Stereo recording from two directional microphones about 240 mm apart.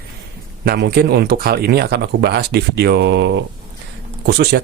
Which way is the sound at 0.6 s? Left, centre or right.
Right.